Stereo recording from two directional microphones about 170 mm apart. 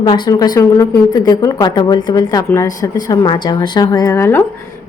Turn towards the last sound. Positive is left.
turn(degrees=15)  # may be behind; listen again after turning